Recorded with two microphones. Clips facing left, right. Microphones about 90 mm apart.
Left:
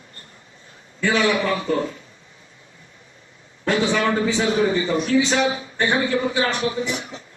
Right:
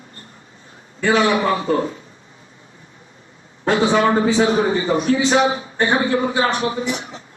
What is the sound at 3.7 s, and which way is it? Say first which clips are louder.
A man's voice: right 4 dB; 30° right (ahead or behind).